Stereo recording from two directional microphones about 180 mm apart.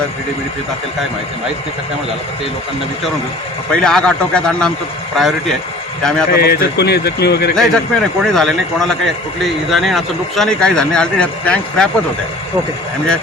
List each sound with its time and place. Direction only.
3.8 s a man's voice: 5° left (ahead or behind)
6.3 s a man's voice: 60° left (ahead or behind)
7.5 s a man's voice: 5° left (ahead or behind)